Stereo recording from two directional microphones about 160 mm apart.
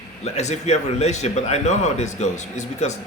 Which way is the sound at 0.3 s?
45° left (ahead or behind).